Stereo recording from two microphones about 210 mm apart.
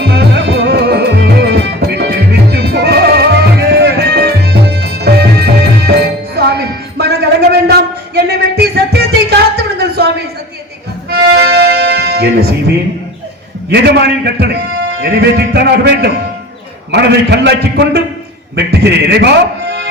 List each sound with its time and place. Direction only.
0.0 s music: 50° right (ahead or behind)
11.1 s music: 50° right (ahead or behind)
13.7 s a man's voice: 50° right (ahead or behind)